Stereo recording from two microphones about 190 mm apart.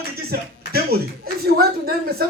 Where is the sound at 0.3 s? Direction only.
55° right (ahead or behind).